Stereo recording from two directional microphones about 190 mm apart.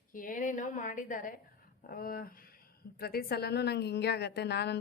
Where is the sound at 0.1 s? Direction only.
45° left (ahead or behind).